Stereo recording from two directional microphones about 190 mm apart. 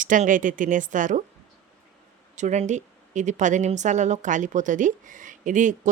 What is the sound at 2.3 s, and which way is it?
Speech, 40° right (ahead or behind).